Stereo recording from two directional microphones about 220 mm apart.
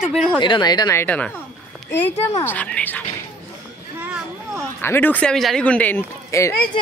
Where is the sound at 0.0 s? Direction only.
Centre (ahead or behind).